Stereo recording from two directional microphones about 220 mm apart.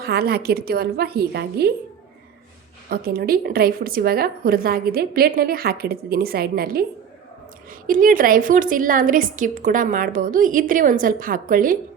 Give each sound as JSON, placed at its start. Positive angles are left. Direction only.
{"t": 0.0, "sound": "a woman's voice", "side_deg": -45}
{"t": 2.9, "sound": "a woman's voice", "side_deg": -45}
{"t": 7.9, "sound": "a woman's voice", "side_deg": -40}